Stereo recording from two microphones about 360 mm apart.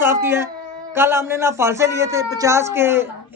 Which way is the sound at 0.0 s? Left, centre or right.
Centre.